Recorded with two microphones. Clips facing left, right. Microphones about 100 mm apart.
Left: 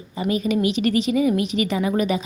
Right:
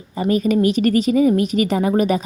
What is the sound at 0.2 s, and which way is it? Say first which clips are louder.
A woman's voice: right 4 dB; 45° right (ahead or behind).